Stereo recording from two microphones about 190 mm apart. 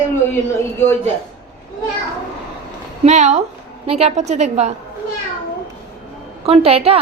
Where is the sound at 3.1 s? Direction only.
35° right (ahead or behind).